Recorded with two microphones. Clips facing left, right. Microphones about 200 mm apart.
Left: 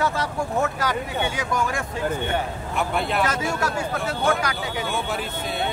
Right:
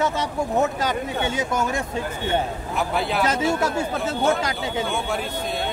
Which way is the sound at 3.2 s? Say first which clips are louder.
Right 3 dB; 20° right (ahead or behind).